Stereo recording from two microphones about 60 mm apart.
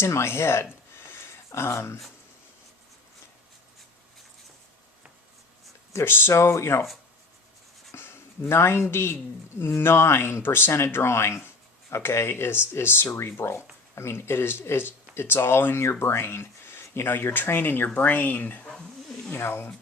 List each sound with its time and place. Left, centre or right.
0.0 s speech: left
5.9 s speech: left
7.9 s speech: left